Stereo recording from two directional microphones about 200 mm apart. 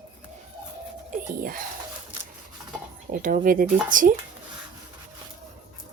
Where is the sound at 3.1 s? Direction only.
40° right (ahead or behind).